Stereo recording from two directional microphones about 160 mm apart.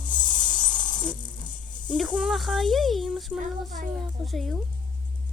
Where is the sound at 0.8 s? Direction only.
30° left (ahead or behind).